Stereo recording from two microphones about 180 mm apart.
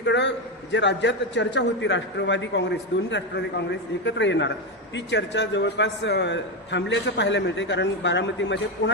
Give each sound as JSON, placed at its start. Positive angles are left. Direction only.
{"t": 0.0, "sound": "a man's voice", "side_deg": 80}